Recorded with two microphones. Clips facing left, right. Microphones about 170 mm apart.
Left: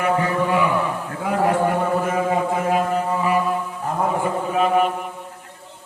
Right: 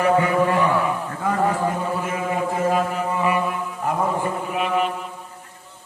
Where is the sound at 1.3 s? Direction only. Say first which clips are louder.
Left 3 dB; 80° left.